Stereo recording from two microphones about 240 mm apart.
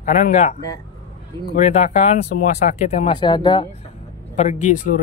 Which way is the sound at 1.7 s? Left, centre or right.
Left.